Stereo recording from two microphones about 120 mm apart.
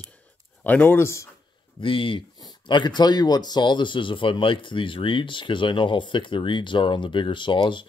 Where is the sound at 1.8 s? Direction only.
45° left (ahead or behind).